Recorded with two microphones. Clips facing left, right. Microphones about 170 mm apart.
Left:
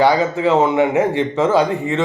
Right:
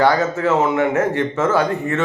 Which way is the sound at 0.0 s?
15° left (ahead or behind).